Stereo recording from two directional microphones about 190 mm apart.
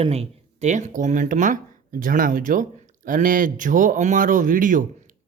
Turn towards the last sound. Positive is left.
turn(degrees=-45)  # may be behind; listen again after turning